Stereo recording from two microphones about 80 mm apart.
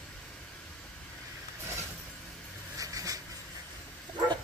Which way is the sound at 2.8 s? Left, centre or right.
Right.